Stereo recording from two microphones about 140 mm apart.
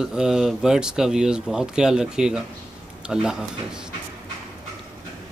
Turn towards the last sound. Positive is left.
turn(degrees=-5)  # may be behind; listen again after turning